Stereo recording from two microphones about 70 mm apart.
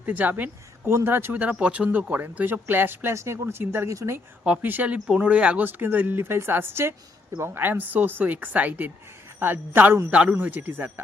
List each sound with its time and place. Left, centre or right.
0.0 s speech: right
1.4 s speech: centre; by 3.8 s right
3.8 s a woman's voice: right
4.6 s speech: right
10.1 s speech: centre
10.3 s speech: right